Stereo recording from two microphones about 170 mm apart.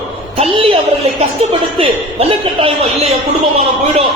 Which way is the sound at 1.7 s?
35° right (ahead or behind).